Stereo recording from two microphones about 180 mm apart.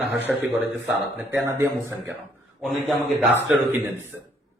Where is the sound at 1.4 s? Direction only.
15° right (ahead or behind).